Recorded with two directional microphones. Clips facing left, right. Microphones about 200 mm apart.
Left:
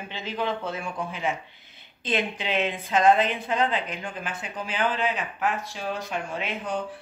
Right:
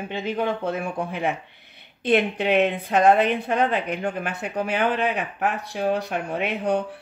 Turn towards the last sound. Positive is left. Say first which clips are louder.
# right 7 dB
turn(degrees=-60)  # may be behind; listen again after turning